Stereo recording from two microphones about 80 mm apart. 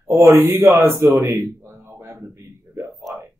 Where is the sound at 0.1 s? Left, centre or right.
Right.